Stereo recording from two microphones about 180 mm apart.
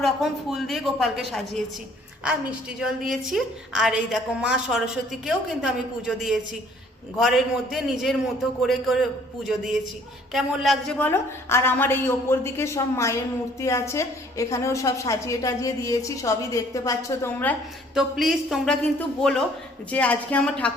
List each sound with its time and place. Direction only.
0.0 s a woman's voice: centre (ahead or behind)
17.9 s a woman's voice: centre (ahead or behind)